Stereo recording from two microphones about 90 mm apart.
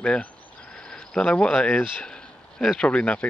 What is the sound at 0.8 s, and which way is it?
Cricket, 10° left (ahead or behind).